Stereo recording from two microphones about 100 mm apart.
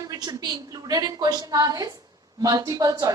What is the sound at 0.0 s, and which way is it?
A woman's voice, 40° right (ahead or behind).